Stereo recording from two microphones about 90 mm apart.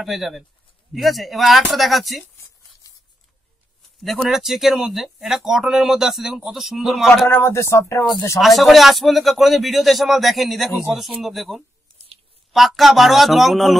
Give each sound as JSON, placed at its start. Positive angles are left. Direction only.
{"t": 0.0, "sound": "a man's voice", "side_deg": 0}
{"t": 4.0, "sound": "a man's voice", "side_deg": 0}
{"t": 7.2, "sound": "speech", "side_deg": 25}
{"t": 8.4, "sound": "a man's voice", "side_deg": 0}